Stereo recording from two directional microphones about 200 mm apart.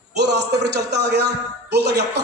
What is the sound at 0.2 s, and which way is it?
Speech, 55° right (ahead or behind).